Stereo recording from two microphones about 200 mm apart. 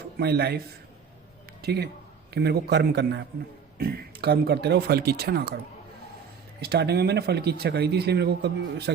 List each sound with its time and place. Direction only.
0.2 s speech: 55° right (ahead or behind)
1.6 s speech: 55° right (ahead or behind)
6.6 s speech: 55° right (ahead or behind)